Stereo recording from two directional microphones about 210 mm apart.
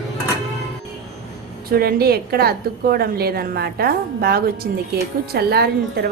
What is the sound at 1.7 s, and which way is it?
A woman's voice, 45° right (ahead or behind).